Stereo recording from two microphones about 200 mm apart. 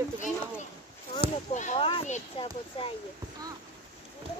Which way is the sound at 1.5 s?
35° left (ahead or behind).